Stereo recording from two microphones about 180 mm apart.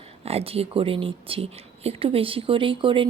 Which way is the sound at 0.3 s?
35° right (ahead or behind).